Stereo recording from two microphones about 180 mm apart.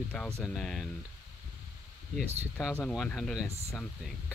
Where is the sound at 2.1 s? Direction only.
Centre (ahead or behind).